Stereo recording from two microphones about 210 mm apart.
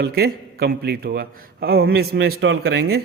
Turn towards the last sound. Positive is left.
turn(degrees=-50)  # may be behind; listen again after turning